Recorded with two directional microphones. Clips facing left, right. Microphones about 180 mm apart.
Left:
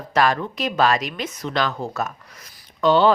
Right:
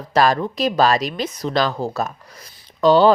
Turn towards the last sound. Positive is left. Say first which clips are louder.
# right 3 dB
turn(degrees=-35)  # may be behind; listen again after turning